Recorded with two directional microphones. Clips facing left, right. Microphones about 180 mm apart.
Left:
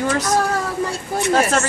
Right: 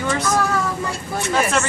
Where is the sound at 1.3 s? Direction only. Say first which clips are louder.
Left 2 dB; 40° left (ahead or behind).